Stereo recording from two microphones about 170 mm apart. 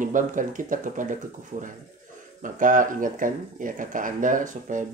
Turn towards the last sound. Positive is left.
turn(degrees=-50)  # may be behind; listen again after turning